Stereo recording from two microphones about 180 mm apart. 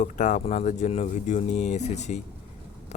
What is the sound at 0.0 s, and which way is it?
Speech, 45° left (ahead or behind).